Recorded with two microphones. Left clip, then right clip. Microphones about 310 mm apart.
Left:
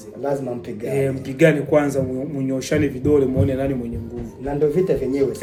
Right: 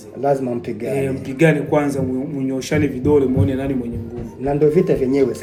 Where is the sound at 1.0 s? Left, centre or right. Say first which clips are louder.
Left 1 dB; centre.